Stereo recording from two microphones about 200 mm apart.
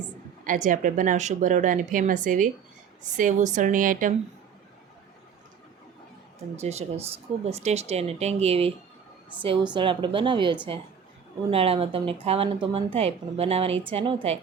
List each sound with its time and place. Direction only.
0.4 s speech: 40° right (ahead or behind)
6.6 s speech: 30° right (ahead or behind)
9.7 s speech: 25° right (ahead or behind)